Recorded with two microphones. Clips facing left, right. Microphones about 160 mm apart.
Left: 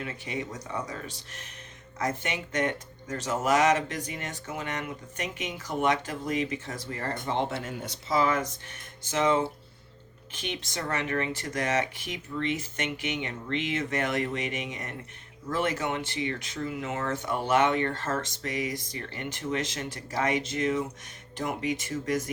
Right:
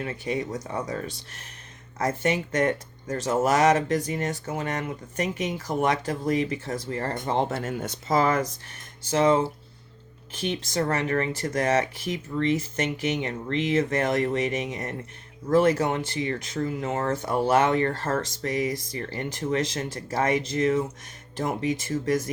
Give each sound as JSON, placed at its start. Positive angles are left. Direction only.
{"t": 0.0, "sound": "speech", "side_deg": -40}
{"t": 2.0, "sound": "speech", "side_deg": -40}